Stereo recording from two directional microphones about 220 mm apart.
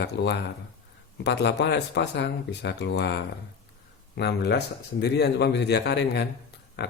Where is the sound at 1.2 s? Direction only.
50° left (ahead or behind).